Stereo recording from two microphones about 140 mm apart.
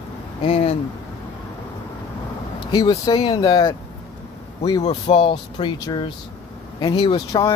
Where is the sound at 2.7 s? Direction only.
25° left (ahead or behind).